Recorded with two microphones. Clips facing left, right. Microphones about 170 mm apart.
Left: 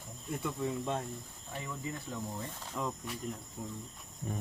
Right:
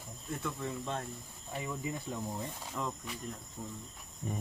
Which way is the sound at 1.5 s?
10° right (ahead or behind).